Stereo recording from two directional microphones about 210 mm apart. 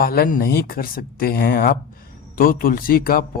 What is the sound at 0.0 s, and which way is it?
Speech, 45° left (ahead or behind).